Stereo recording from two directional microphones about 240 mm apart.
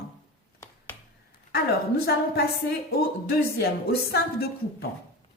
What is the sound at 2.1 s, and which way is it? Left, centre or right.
Speech, left.